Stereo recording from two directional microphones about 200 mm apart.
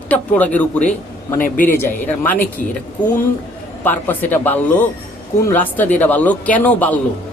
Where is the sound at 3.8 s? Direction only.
10° left (ahead or behind).